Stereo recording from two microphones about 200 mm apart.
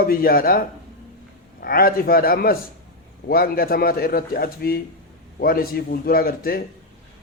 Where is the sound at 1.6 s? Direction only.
45° left (ahead or behind).